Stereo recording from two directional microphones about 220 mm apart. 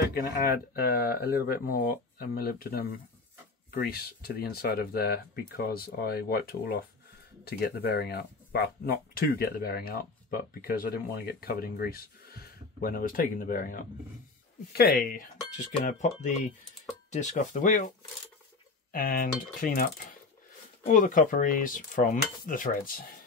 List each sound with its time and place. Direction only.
0.1 s speech: 40° left (ahead or behind)
14.7 s cutlery: 45° left (ahead or behind)